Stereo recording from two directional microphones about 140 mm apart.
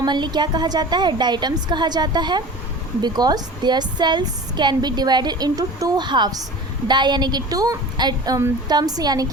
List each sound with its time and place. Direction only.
0.0 s a woman's voice: 30° right (ahead or behind)